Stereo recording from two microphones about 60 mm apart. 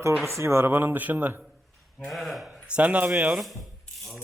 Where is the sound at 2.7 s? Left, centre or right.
Right.